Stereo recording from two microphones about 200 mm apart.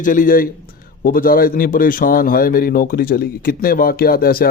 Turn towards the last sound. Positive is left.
turn(degrees=50)  # may be behind; listen again after turning